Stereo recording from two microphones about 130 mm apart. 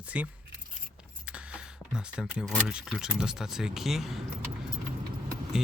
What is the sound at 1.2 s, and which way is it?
Keys jangling, 10° right (ahead or behind).